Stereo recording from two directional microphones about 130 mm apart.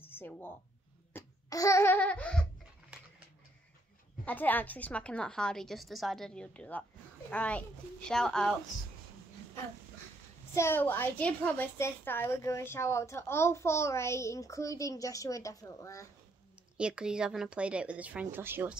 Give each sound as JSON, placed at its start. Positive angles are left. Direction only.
{"t": 0.0, "sound": "speech", "side_deg": 15}
{"t": 1.1, "sound": "babbling", "side_deg": 25}
{"t": 4.2, "sound": "a woman's voice", "side_deg": 15}
{"t": 10.5, "sound": "a woman's voice", "side_deg": 20}
{"t": 16.7, "sound": "a woman's voice", "side_deg": -5}